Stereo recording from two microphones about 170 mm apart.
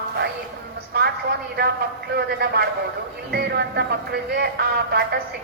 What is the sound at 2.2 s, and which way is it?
Speech, 70° right (ahead or behind).